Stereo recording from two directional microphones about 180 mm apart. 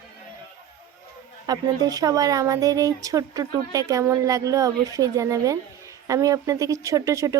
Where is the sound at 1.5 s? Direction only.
20° right (ahead or behind).